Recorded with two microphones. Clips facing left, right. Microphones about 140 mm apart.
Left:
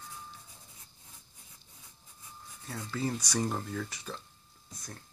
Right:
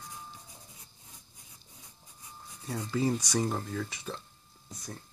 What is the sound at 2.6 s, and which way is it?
Speech, 15° right (ahead or behind).